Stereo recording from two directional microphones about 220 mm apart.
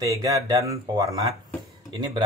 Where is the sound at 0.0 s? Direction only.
15° right (ahead or behind).